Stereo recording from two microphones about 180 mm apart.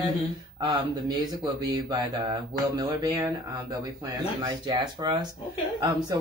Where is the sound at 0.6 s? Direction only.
25° right (ahead or behind).